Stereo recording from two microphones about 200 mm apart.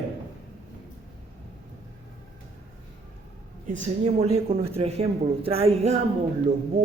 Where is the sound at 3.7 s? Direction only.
35° right (ahead or behind).